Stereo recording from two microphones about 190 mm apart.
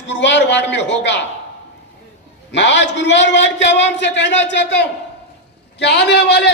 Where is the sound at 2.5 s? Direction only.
70° left (ahead or behind).